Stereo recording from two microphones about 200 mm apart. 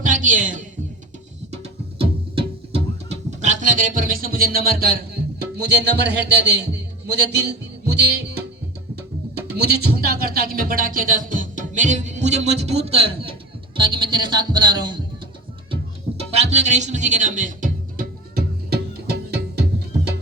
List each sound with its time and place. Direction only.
0.0 s a sound: 40° right (ahead or behind)
1.5 s music: 30° right (ahead or behind); by 5.2 s 50° right (ahead or behind)
5.6 s a man's voice: 55° right (ahead or behind)
9.5 s a man's voice: 55° right (ahead or behind); by 15.0 s 20° right (ahead or behind)
15.7 s music: 30° right (ahead or behind); by 19.6 s 50° right (ahead or behind)